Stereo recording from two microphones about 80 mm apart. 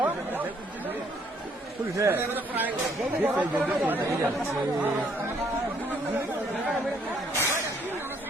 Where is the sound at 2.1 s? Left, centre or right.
Right.